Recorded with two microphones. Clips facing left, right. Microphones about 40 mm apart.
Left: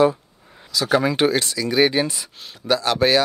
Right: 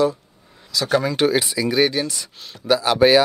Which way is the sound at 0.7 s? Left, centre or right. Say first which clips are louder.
Left 1 dB; centre.